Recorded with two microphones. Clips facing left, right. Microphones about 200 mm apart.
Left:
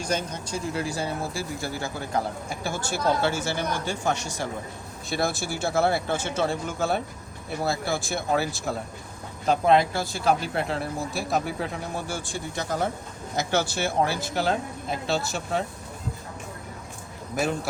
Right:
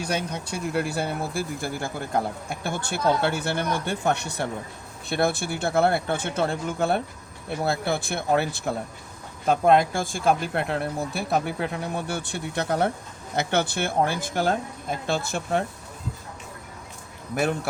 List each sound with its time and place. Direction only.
0.0 s speech: 65° right (ahead or behind)